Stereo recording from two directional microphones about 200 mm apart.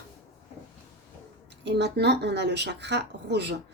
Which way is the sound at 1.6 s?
55° right (ahead or behind).